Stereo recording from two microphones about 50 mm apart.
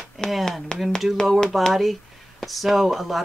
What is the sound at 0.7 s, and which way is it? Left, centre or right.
Speech, centre.